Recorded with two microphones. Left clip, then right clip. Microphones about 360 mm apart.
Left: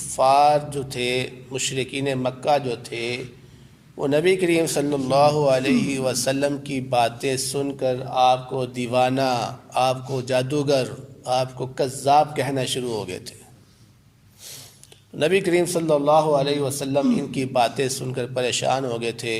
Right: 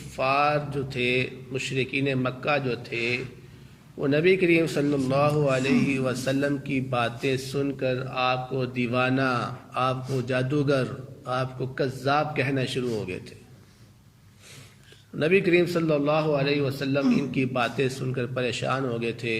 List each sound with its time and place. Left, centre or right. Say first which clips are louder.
0.2 s a man's voice: left 7 dB; centre
15.2 s a man's voice: left 2 dB; left